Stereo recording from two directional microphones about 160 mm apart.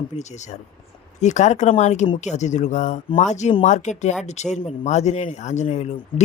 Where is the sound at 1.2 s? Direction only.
45° left (ahead or behind).